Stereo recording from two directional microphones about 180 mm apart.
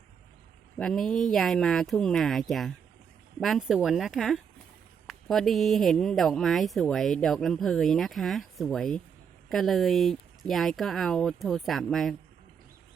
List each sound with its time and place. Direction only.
0.8 s speech: 5° left (ahead or behind)